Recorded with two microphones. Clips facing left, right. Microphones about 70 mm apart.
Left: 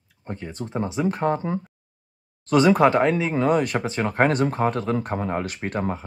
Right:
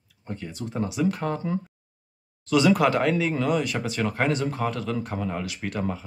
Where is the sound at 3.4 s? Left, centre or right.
Left.